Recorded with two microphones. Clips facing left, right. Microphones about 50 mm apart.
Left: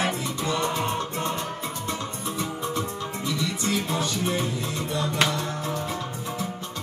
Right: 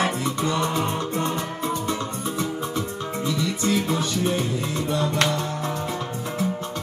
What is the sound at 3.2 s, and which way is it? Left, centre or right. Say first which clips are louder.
Music: right 4 dB; right.